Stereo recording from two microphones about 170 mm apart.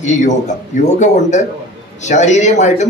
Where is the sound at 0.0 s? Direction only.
45° left (ahead or behind).